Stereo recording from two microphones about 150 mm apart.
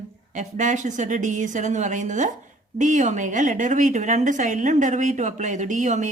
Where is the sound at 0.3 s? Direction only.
55° right (ahead or behind).